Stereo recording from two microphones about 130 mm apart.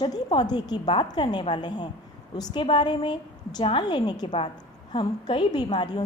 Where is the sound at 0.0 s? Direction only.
35° left (ahead or behind).